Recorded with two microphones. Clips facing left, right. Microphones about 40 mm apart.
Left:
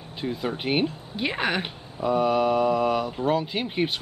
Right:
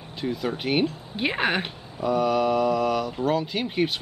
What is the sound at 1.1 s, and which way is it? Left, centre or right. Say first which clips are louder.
Speech: right 2 dB; centre.